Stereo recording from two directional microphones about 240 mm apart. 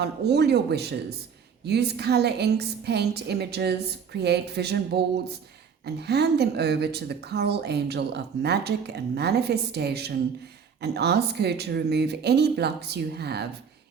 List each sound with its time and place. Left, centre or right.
0.0 s speech: right